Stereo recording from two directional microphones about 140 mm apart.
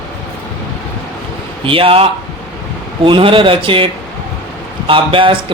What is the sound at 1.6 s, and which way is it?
A man's voice, 40° right (ahead or behind).